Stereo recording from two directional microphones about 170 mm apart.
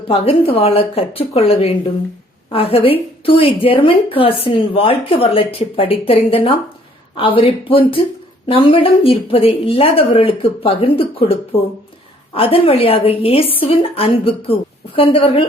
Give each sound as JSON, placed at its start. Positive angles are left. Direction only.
{"t": 0.1, "sound": "speech", "side_deg": 35}